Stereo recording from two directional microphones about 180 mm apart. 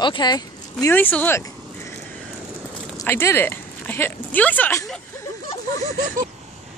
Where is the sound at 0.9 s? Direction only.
10° left (ahead or behind).